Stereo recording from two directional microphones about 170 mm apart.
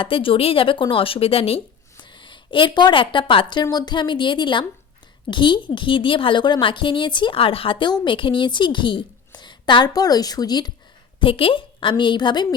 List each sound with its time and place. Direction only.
0.0 s a woman's voice: 30° left (ahead or behind)